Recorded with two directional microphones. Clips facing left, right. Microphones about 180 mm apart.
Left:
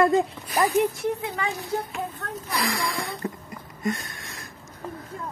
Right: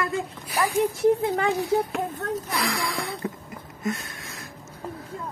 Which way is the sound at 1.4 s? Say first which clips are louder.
Right 6 dB; 55° right (ahead or behind).